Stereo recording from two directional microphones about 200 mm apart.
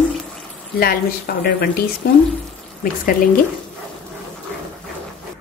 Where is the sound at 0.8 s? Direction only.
50° left (ahead or behind).